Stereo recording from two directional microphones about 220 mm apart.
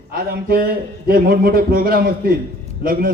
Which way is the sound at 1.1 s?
45° right (ahead or behind).